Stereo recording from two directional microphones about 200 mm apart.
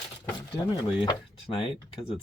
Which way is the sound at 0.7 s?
25° left (ahead or behind).